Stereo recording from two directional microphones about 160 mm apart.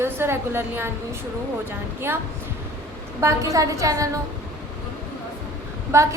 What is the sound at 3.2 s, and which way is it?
Speech, 20° right (ahead or behind).